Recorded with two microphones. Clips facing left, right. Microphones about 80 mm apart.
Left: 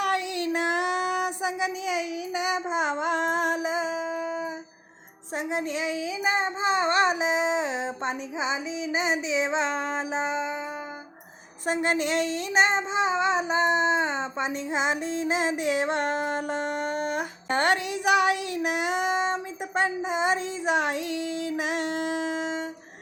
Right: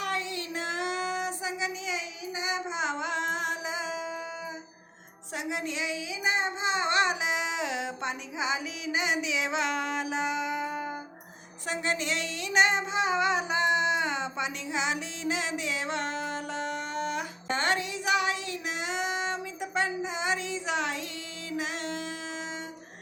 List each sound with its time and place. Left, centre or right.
0.0 s child singing: left
5.4 s child singing: left
11.6 s child singing: left